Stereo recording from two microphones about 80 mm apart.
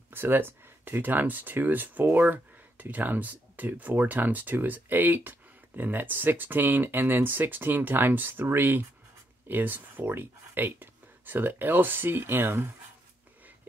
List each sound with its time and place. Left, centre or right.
0.1 s speech: right